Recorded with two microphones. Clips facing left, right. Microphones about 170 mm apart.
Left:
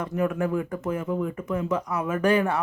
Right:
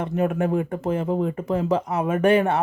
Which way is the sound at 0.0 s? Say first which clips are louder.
Right 3 dB; 25° right (ahead or behind).